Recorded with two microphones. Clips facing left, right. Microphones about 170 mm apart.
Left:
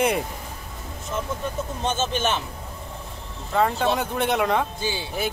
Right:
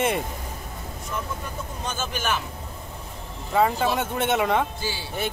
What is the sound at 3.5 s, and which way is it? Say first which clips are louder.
Speech: even; centre (ahead or behind).